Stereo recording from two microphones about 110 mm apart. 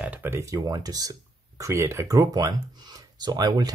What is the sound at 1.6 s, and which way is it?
Speech, 25° right (ahead or behind).